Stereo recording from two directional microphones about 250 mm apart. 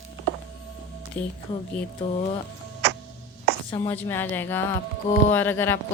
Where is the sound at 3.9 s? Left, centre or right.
Centre.